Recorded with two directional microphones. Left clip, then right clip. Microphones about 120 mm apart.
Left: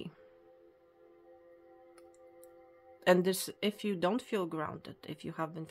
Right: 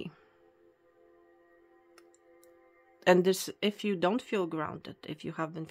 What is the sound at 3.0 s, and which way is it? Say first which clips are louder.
Speech: right 3 dB; 20° right (ahead or behind).